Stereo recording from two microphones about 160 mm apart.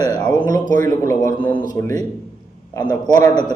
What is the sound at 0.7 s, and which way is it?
Speech, 55° right (ahead or behind).